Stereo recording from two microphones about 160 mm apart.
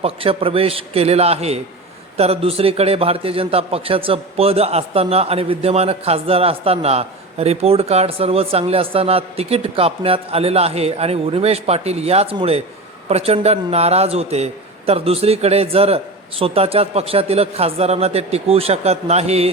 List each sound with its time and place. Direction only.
0.0 s a man's voice: 35° right (ahead or behind)